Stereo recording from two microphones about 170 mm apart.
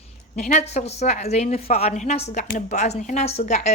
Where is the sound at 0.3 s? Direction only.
45° left (ahead or behind).